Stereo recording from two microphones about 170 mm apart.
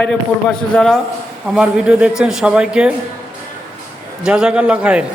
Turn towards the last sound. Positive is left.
turn(degrees=-5)  # may be behind; listen again after turning